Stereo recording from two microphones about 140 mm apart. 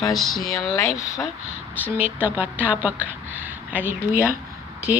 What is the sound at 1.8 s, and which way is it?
A woman's voice, 10° right (ahead or behind).